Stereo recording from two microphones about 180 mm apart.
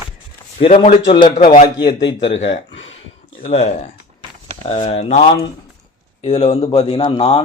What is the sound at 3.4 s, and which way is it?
A man's voice, 40° left (ahead or behind).